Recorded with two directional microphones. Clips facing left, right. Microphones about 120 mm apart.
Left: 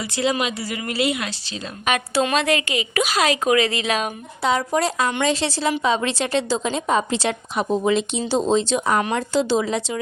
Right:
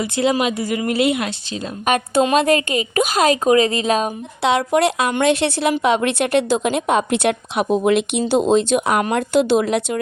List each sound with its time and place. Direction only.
0.0 s a woman's voice: 50° right (ahead or behind)
4.4 s a woman's voice: 70° right (ahead or behind)